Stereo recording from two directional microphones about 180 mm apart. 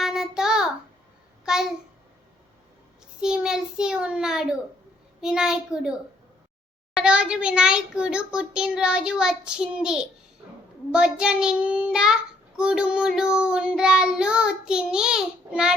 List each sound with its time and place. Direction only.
0.0 s child singing: centre (ahead or behind)
1.5 s a sound: 5° right (ahead or behind)
3.2 s a child's voice: 5° right (ahead or behind)
5.2 s child singing: 5° right (ahead or behind)
6.9 s child singing: 5° right (ahead or behind)